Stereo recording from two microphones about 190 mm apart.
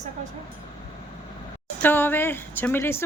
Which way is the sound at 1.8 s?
10° left (ahead or behind).